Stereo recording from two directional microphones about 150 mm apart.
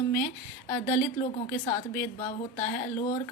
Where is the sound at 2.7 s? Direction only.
55° left (ahead or behind).